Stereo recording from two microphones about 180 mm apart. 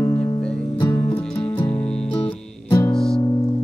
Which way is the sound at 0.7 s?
25° left (ahead or behind).